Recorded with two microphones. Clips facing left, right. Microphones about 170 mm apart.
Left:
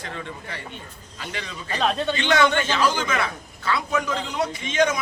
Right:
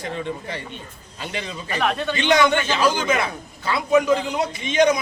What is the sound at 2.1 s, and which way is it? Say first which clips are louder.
A man's voice: right 4 dB; 15° right (ahead or behind).